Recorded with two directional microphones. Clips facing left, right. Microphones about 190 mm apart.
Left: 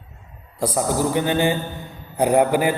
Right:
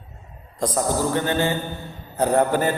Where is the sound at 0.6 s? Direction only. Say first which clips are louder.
Left 1 dB; 10° left (ahead or behind).